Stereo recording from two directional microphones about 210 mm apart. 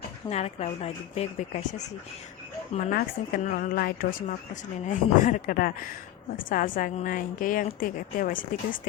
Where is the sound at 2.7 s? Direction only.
35° left (ahead or behind).